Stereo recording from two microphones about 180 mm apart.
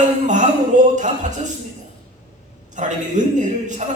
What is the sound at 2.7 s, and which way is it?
A man's voice, 45° right (ahead or behind).